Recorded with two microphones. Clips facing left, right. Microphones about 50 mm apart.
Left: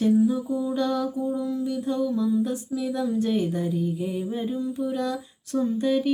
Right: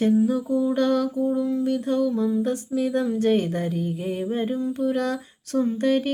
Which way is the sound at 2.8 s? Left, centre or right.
Right.